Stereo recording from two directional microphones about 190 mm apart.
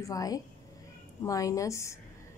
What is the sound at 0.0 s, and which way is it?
Speech, 20° left (ahead or behind).